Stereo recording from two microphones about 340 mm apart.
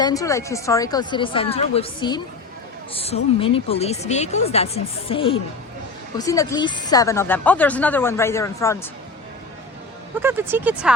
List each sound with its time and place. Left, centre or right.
0.0 s speech: centre
10.2 s speech: centre